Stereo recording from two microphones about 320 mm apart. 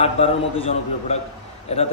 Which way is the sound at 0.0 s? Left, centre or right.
Centre.